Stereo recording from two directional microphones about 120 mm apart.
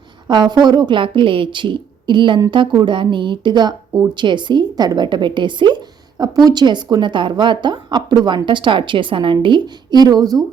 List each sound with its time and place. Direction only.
0.3 s a woman's voice: 35° right (ahead or behind)